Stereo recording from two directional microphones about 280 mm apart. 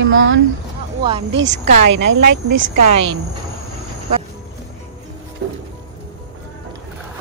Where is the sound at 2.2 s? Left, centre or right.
Right.